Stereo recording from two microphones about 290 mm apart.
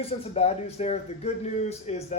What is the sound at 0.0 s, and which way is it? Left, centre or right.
Speech, left.